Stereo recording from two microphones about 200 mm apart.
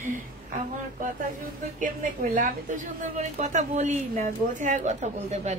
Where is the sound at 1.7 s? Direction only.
40° right (ahead or behind).